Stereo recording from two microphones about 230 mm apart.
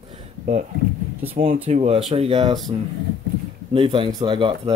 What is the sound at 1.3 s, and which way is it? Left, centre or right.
Speech, right.